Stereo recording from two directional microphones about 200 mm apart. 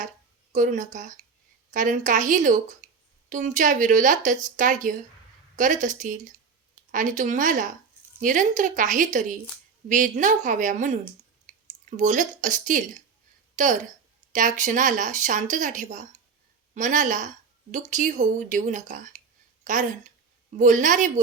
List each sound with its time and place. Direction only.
0.5 s speech: 40° right (ahead or behind)
11.5 s a sound: 35° right (ahead or behind)
11.9 s speech: 40° right (ahead or behind)